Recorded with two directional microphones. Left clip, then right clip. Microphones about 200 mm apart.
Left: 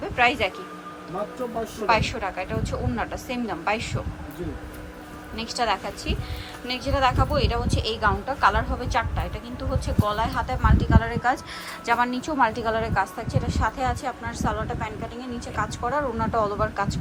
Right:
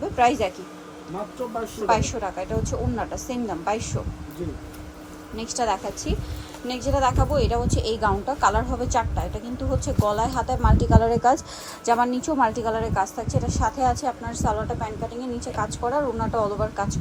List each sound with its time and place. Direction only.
0.0 s speech: 20° right (ahead or behind)
1.9 s a woman's voice: 20° right (ahead or behind)
5.4 s a woman's voice: 20° right (ahead or behind)